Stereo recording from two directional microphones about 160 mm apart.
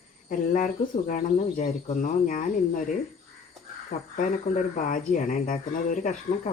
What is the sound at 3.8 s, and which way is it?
Speech, 60° left (ahead or behind).